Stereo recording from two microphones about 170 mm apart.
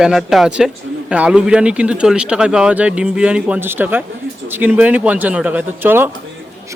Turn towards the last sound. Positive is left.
turn(degrees=-10)  # may be behind; listen again after turning